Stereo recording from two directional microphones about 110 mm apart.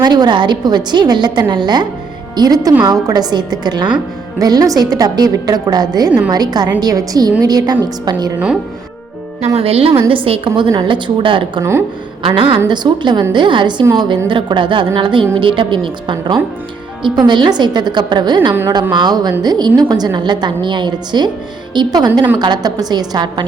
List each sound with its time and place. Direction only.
0.0 s a woman's voice: 40° right (ahead or behind)
9.6 s a woman's voice: 65° right (ahead or behind); by 23.3 s 40° right (ahead or behind)